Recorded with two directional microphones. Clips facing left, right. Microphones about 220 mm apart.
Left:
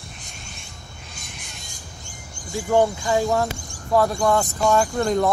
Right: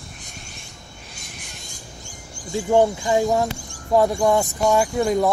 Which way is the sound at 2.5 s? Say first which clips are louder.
Right 2 dB; 15° right (ahead or behind).